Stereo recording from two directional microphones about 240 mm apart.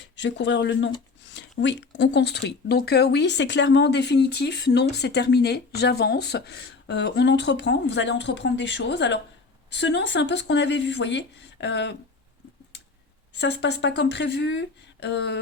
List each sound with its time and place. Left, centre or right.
0.0 s speech: left
13.3 s speech: left